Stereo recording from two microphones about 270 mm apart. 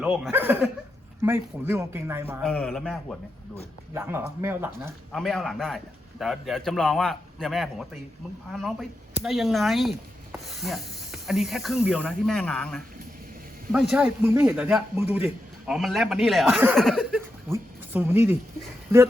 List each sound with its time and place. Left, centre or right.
0.0 s speech: centre
2.5 s speech: centre